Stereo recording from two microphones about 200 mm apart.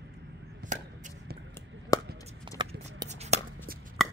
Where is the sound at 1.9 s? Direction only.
15° left (ahead or behind).